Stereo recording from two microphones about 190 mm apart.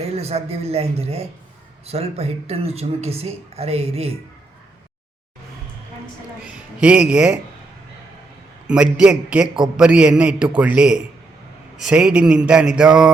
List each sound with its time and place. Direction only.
0.2 s speech: 30° right (ahead or behind)
6.7 s a man's voice: 5° right (ahead or behind)
8.6 s a man's voice: 5° right (ahead or behind)